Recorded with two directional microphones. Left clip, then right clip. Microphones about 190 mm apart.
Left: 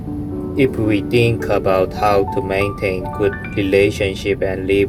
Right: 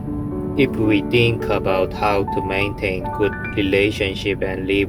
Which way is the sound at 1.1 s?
45° left (ahead or behind).